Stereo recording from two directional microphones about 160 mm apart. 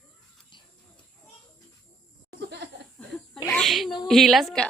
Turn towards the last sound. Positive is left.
turn(degrees=0)  # may be behind; listen again after turning